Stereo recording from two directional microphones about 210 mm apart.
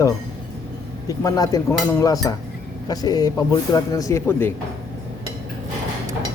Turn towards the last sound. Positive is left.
turn(degrees=10)  # may be behind; listen again after turning